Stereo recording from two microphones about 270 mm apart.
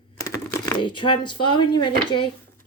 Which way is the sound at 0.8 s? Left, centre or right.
Centre.